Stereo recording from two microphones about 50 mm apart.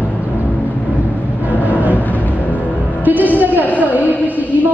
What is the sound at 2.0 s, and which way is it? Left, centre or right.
Vehicle, left.